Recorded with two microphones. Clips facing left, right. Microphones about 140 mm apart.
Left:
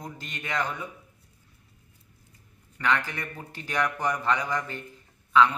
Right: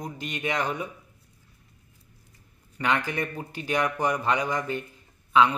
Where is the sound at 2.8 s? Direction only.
20° right (ahead or behind).